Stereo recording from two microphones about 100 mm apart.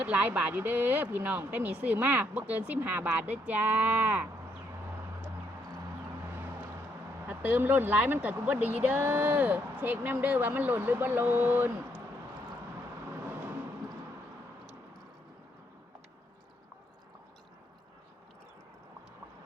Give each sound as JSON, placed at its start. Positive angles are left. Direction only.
{"t": 0.0, "sound": "speech", "side_deg": -15}
{"t": 7.3, "sound": "speech", "side_deg": -15}
{"t": 13.2, "sound": "vehicle", "side_deg": -15}